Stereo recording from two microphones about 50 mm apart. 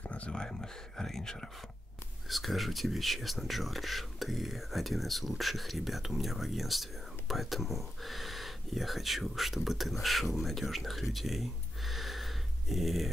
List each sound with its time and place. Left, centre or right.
0.0 s a sound: left
0.3 s speech: centre
2.2 s speech: centre